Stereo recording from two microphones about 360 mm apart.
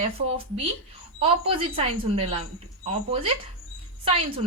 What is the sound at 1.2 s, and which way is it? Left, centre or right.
A woman's voice, centre.